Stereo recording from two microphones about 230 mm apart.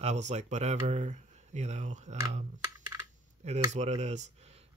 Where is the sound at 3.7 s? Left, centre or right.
Right.